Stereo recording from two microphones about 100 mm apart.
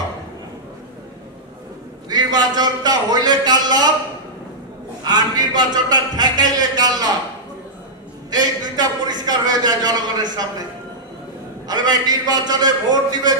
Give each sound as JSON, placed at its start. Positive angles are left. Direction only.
{"t": 2.0, "sound": "a man's voice", "side_deg": -45}
{"t": 5.0, "sound": "a man's voice", "side_deg": -45}
{"t": 8.3, "sound": "a man's voice", "side_deg": -40}
{"t": 11.6, "sound": "a man's voice", "side_deg": -45}